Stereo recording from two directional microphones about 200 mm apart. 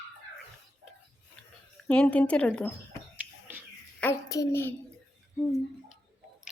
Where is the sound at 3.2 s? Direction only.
10° right (ahead or behind).